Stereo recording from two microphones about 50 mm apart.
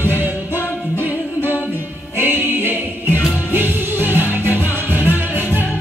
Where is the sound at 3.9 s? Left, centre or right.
Left.